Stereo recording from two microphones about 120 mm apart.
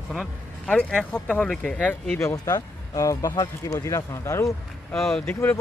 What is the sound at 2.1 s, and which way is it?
Speech, 25° left (ahead or behind).